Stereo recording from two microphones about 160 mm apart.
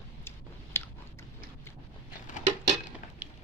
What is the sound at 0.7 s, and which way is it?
Biting, 15° left (ahead or behind).